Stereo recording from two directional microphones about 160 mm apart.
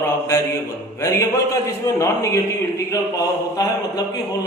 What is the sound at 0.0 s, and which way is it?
A man's voice, 15° left (ahead or behind).